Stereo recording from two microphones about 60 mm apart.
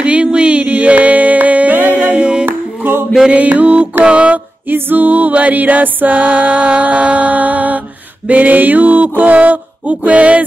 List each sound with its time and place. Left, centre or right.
0.0 s music: centre
2.0 s a capella: right
2.4 s music: right
3.2 s mantra: centre
4.0 s music: right
4.6 s music: right